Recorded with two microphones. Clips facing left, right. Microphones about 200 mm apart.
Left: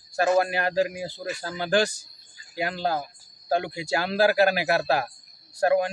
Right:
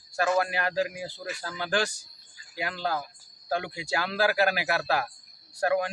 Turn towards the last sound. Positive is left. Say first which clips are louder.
# left 4 dB
turn(degrees=35)  # may be behind; listen again after turning